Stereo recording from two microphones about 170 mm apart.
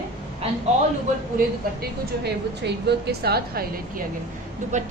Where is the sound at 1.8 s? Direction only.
75° right (ahead or behind).